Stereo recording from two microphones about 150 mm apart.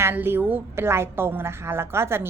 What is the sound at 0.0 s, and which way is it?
A woman's voice, 15° right (ahead or behind).